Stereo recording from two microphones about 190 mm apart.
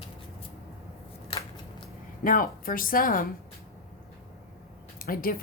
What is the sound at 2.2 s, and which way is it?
Speech, 50° left (ahead or behind).